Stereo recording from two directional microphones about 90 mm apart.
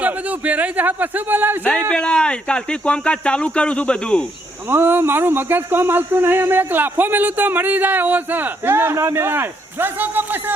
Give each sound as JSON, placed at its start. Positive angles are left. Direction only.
{"t": 0.0, "sound": "a man's voice", "side_deg": -15}
{"t": 1.9, "sound": "speech", "side_deg": 10}
{"t": 4.7, "sound": "speech", "side_deg": -25}